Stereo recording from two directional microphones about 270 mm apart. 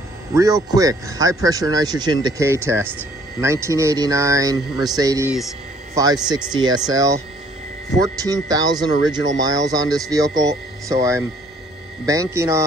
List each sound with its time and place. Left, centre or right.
0.3 s speech: centre